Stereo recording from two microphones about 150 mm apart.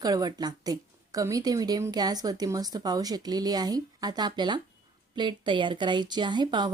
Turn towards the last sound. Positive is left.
turn(degrees=-30)  # may be behind; listen again after turning